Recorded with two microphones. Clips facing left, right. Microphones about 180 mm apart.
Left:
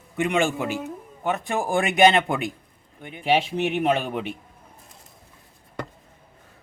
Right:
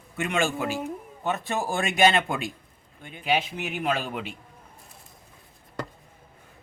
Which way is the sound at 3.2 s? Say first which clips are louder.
Left 5 dB; 30° left (ahead or behind).